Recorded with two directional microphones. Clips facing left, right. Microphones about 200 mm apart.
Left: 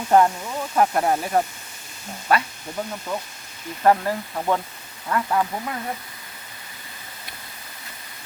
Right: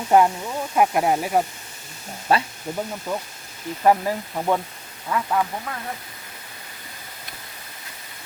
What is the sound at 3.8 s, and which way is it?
Speech, 10° right (ahead or behind).